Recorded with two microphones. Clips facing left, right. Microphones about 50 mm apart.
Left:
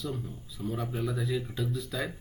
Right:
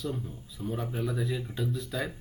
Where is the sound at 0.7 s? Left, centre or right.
Centre.